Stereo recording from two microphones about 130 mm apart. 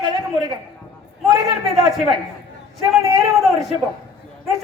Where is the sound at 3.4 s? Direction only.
Centre (ahead or behind).